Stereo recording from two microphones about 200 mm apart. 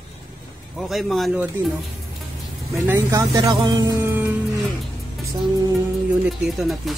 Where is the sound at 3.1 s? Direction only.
15° right (ahead or behind).